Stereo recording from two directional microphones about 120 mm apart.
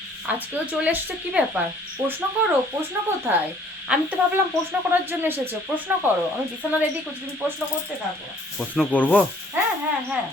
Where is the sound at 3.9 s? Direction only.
10° right (ahead or behind).